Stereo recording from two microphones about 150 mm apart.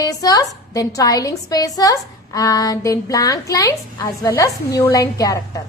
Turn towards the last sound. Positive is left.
turn(degrees=25)  # may be behind; listen again after turning